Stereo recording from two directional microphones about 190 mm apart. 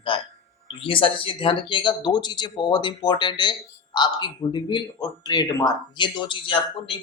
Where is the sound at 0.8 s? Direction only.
30° left (ahead or behind).